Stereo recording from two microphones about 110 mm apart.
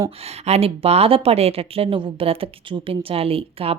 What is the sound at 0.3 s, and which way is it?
Speech, 70° right (ahead or behind).